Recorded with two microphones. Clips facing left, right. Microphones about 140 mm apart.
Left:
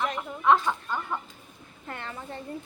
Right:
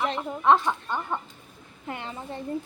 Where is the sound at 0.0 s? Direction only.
25° right (ahead or behind).